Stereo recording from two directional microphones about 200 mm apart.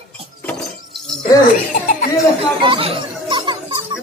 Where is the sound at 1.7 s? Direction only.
45° left (ahead or behind).